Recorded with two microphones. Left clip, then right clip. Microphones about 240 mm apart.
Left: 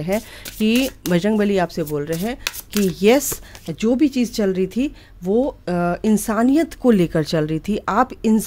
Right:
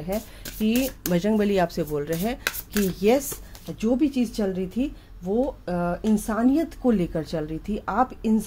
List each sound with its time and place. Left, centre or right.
0.0 s speech: left
1.0 s chopping: left
3.8 s speech: left